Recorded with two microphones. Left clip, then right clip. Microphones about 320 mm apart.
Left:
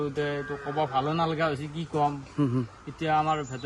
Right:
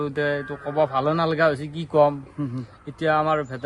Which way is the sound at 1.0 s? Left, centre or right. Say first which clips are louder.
Right 7 dB; centre.